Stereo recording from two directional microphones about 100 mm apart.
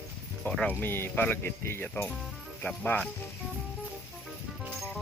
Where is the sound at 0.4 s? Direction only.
20° left (ahead or behind).